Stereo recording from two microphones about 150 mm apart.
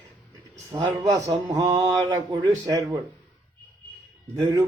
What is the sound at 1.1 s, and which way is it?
Mantra, 25° right (ahead or behind).